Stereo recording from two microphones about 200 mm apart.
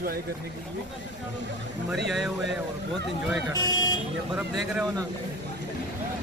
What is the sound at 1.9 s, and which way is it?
Speech, centre (ahead or behind).